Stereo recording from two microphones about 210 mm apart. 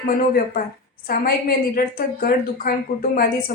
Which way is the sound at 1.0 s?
45° left (ahead or behind).